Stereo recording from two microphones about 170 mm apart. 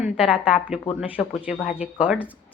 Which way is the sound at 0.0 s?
5° right (ahead or behind).